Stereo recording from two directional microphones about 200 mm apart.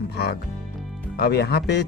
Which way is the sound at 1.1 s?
55° left (ahead or behind).